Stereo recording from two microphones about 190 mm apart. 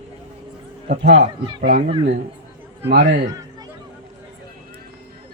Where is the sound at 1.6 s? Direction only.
55° right (ahead or behind).